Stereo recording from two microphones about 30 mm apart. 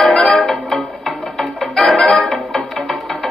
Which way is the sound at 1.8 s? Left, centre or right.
Centre.